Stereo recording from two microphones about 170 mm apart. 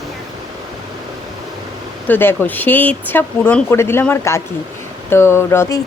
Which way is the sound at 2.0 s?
10° left (ahead or behind).